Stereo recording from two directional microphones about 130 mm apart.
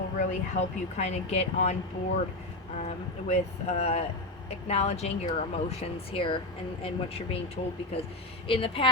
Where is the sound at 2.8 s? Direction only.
60° left (ahead or behind); by 6.4 s 45° left (ahead or behind).